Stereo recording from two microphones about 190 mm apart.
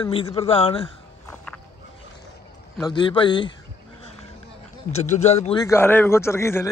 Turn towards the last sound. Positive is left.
turn(degrees=15)  # may be behind; listen again after turning